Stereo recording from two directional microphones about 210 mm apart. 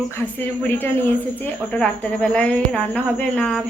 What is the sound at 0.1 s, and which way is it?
A woman's voice, 10° left (ahead or behind).